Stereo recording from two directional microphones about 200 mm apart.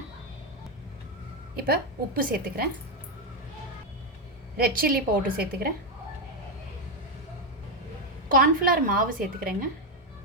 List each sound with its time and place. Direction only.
1.5 s a woman's voice: 50° right (ahead or behind)
4.5 s a woman's voice: 45° right (ahead or behind)
8.3 s a woman's voice: 45° right (ahead or behind)